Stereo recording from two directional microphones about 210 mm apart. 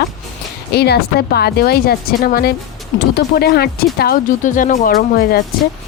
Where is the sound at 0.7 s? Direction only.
50° left (ahead or behind).